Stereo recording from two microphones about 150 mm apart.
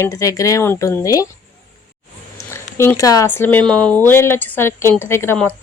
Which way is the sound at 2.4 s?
15° left (ahead or behind).